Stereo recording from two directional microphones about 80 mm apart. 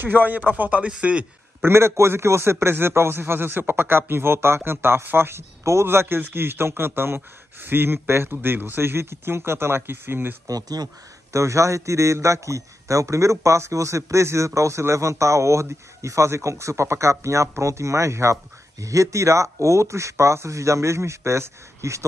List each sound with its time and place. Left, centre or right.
0.0 s a man's voice: right
1.6 s a man's voice: right
10.4 s speech: right
11.3 s a man's voice: right